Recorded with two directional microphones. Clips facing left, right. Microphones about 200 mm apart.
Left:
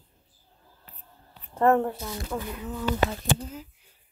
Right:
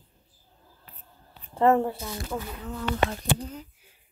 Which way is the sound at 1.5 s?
10° right (ahead or behind).